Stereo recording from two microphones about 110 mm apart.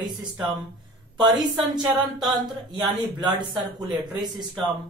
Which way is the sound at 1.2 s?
40° right (ahead or behind).